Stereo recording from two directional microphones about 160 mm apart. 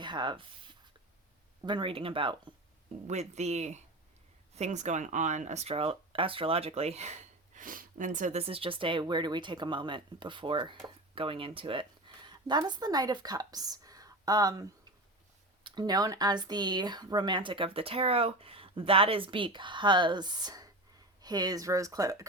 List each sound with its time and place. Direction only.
0.0 s a sound: 30° right (ahead or behind)
1.6 s speech: 30° right (ahead or behind)
3.1 s speech: 45° right (ahead or behind); by 22.2 s 20° right (ahead or behind)